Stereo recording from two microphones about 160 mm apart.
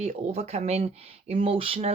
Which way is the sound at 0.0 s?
45° right (ahead or behind).